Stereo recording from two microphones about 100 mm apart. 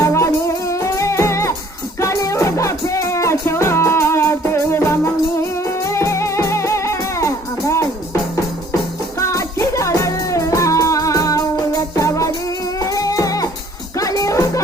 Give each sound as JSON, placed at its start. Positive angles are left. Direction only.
{"t": 0.0, "sound": "music", "side_deg": 30}
{"t": 9.1, "sound": "music", "side_deg": 30}